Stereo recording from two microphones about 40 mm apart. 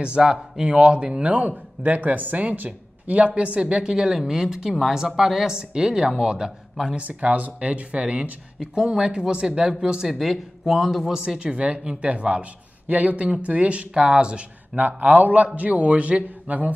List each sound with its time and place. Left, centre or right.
0.2 s speech: centre
1.2 s speech: right
7.0 s speech: right
8.9 s speech: centre
10.0 s speech: centre
11.1 s speech: right
14.8 s speech: right